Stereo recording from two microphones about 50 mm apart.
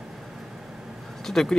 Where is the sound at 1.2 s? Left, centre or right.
Centre.